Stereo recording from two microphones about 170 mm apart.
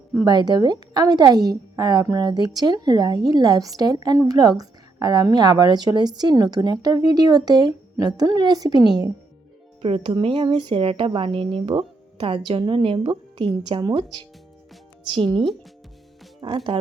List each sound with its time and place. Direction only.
0.3 s a woman's voice: 25° right (ahead or behind)